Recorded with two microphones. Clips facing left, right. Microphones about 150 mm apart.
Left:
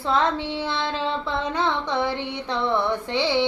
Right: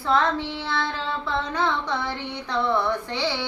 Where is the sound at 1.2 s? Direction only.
20° left (ahead or behind).